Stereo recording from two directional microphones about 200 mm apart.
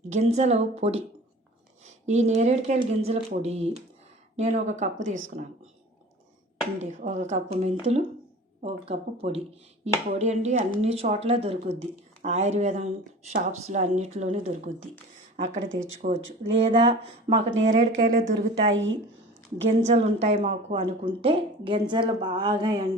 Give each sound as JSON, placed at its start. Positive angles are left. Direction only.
{"t": 0.1, "sound": "speech", "side_deg": -35}
{"t": 6.7, "sound": "speech", "side_deg": -35}
{"t": 8.6, "sound": "a woman's voice", "side_deg": -30}
{"t": 16.0, "sound": "a woman's voice", "side_deg": -40}
{"t": 18.7, "sound": "speech", "side_deg": -70}
{"t": 19.6, "sound": "a woman's voice", "side_deg": -35}